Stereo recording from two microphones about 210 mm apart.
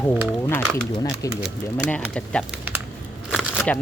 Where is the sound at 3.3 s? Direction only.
Centre (ahead or behind).